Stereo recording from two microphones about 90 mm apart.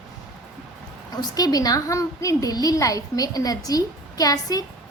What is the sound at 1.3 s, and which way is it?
A woman's voice, 45° left (ahead or behind).